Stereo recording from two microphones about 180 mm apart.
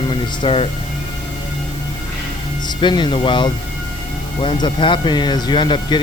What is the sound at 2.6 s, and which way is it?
Speech, 25° left (ahead or behind).